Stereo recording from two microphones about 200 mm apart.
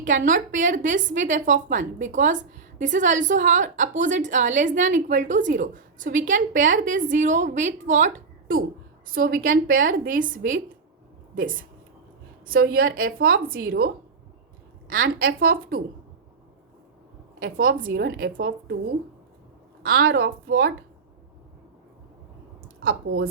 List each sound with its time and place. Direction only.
0.0 s a woman's voice: 40° right (ahead or behind)
12.5 s a woman's voice: 45° right (ahead or behind)
17.4 s a woman's voice: 45° right (ahead or behind)
19.8 s a woman's voice: 50° right (ahead or behind)
22.8 s a woman's voice: 50° right (ahead or behind)